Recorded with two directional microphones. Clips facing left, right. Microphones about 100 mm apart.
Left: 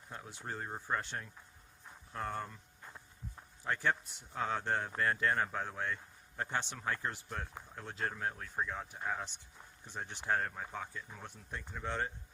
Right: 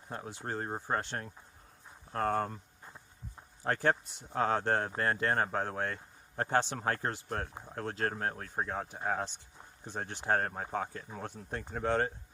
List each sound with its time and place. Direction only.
0.1 s speech: 35° right (ahead or behind)
0.4 s speech: 45° right (ahead or behind)
0.7 s speech: 30° right (ahead or behind)
0.9 s speech: 45° right (ahead or behind)
2.8 s a sound: 15° right (ahead or behind)
3.6 s speech: 45° right (ahead or behind)